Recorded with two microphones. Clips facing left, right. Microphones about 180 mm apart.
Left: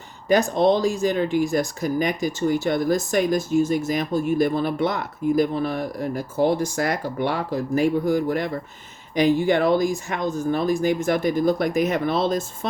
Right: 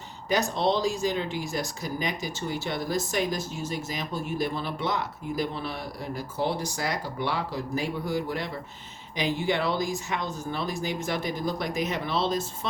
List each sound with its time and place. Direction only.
0.3 s speech: 50° left (ahead or behind)